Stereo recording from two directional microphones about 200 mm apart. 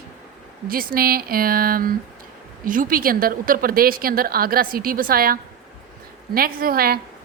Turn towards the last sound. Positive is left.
turn(degrees=-50)  # may be behind; listen again after turning